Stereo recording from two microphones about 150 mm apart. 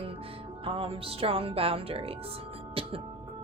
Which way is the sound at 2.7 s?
40° right (ahead or behind).